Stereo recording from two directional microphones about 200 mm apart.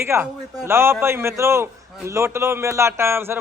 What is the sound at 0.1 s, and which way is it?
A man's voice, 15° right (ahead or behind).